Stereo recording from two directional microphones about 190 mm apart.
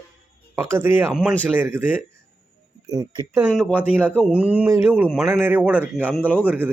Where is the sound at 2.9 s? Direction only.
20° right (ahead or behind).